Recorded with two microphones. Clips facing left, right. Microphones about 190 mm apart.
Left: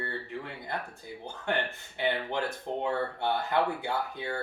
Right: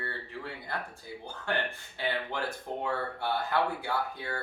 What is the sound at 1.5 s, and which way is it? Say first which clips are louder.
Speech: left 2 dB; 20° left (ahead or behind).